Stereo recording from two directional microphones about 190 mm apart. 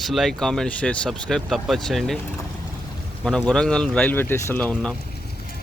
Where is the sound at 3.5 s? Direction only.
5° left (ahead or behind).